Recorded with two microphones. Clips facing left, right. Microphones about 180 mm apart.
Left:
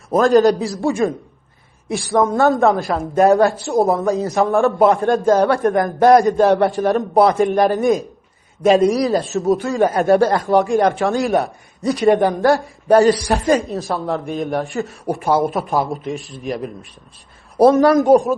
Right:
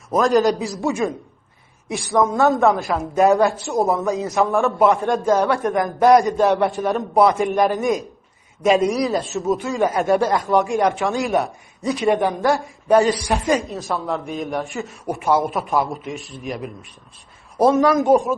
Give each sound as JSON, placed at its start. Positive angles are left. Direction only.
{"t": 0.6, "sound": "a man's voice", "side_deg": 35}
{"t": 2.1, "sound": "a man's voice", "side_deg": 35}
{"t": 17.6, "sound": "a man's voice", "side_deg": 35}